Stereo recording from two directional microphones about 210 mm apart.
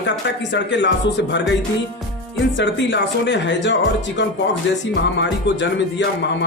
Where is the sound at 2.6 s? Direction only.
55° left (ahead or behind).